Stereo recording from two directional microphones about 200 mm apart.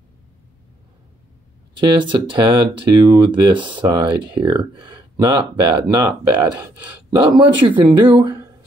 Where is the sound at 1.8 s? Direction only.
25° right (ahead or behind).